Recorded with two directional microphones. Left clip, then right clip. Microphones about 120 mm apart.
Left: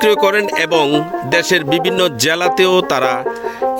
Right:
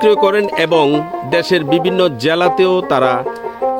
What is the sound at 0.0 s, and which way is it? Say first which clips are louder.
Speech: right 1 dB; 10° left (ahead or behind).